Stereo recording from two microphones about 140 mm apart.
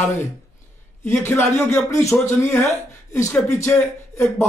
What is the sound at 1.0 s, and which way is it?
A man's voice, 15° left (ahead or behind).